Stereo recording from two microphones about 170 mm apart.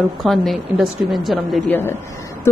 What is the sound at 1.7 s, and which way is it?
Speech, 15° left (ahead or behind).